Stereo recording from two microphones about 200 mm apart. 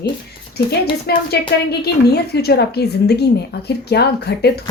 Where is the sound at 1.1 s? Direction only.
55° left (ahead or behind).